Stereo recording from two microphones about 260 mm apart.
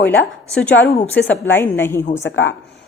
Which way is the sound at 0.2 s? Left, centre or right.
Centre.